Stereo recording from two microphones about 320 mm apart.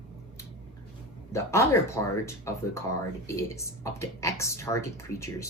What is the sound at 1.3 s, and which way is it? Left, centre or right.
Speech, centre.